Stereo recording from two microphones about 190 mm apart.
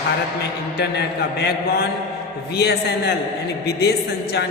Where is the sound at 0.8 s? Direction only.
60° left (ahead or behind).